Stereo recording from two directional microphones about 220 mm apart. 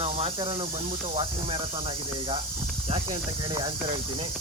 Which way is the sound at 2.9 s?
20° right (ahead or behind).